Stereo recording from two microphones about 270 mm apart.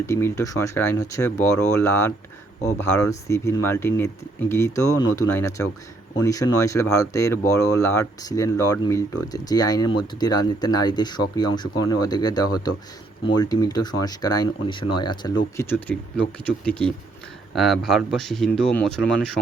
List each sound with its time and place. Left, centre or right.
0.0 s speech: centre